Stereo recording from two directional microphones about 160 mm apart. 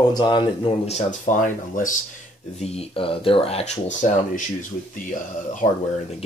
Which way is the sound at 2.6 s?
40° left (ahead or behind).